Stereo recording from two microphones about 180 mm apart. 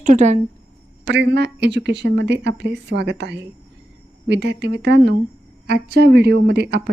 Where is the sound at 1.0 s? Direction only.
70° right (ahead or behind).